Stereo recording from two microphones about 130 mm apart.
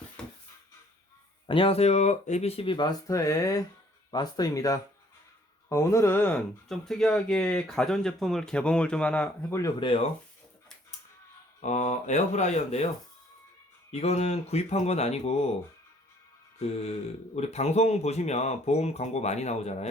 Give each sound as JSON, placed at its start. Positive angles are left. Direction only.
{"t": 0.2, "sound": "a sound", "side_deg": 5}
{"t": 1.5, "sound": "speech", "side_deg": 45}
{"t": 6.7, "sound": "speech", "side_deg": 5}
{"t": 9.5, "sound": "speech", "side_deg": 25}
{"t": 11.6, "sound": "speech", "side_deg": 65}
{"t": 13.9, "sound": "speech", "side_deg": 55}
{"t": 17.3, "sound": "speech", "side_deg": 55}